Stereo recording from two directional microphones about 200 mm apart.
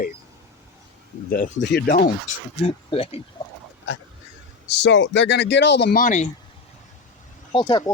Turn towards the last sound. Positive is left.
turn(degrees=25)  # may be behind; listen again after turning